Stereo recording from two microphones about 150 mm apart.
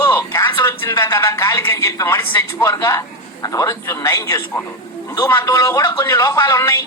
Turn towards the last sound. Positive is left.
turn(degrees=20)  # may be behind; listen again after turning